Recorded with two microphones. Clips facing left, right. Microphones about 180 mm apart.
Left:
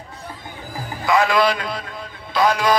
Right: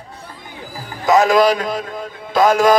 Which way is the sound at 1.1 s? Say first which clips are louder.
Right 5 dB; 40° right (ahead or behind).